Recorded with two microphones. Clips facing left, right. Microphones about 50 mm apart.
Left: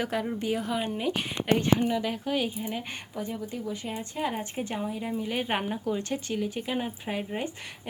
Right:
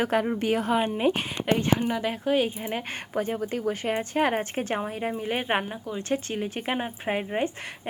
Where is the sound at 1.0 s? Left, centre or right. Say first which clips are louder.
Right 4 dB; right.